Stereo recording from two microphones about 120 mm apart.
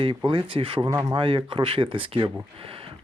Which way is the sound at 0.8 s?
25° right (ahead or behind).